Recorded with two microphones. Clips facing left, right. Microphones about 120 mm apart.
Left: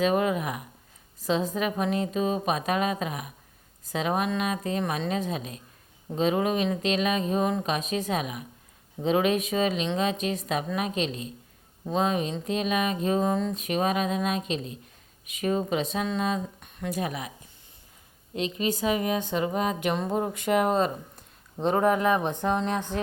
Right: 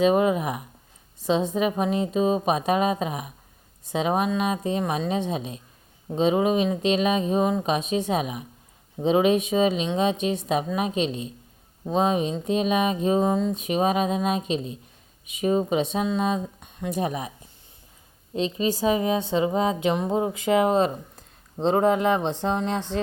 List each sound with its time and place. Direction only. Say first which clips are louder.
0.0 s speech: right 4 dB; 25° right (ahead or behind)
13.2 s speech: right 3 dB; 15° right (ahead or behind)
13.5 s speech: right 3 dB; 30° right (ahead or behind)
15.7 s speech: right 4 dB; 30° right (ahead or behind)
16.9 s speech: right 4 dB; 30° right (ahead or behind)
18.3 s speech: right 3 dB; 30° right (ahead or behind)